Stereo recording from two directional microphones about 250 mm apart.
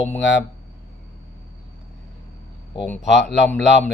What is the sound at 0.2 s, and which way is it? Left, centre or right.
Speech, left.